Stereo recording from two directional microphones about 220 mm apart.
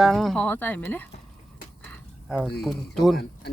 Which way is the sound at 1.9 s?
5° right (ahead or behind).